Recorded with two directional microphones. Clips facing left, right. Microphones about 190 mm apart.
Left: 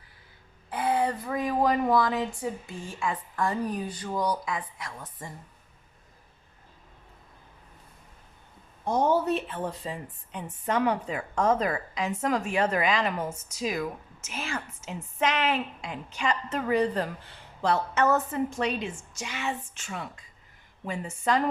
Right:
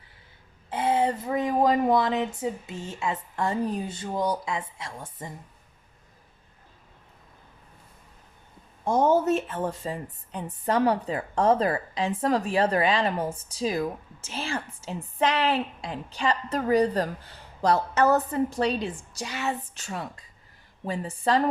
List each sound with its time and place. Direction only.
0.7 s speech: 25° right (ahead or behind)
8.8 s speech: 50° right (ahead or behind); by 21.4 s 35° right (ahead or behind)